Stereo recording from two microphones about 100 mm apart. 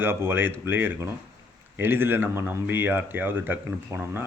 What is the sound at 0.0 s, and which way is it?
Speech, 20° right (ahead or behind).